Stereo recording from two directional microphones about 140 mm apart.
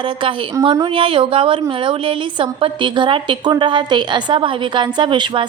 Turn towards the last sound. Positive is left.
turn(degrees=-35)  # may be behind; listen again after turning